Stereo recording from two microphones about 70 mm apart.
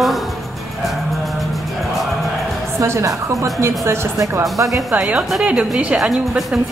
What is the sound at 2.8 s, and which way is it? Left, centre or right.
A woman's voice, right.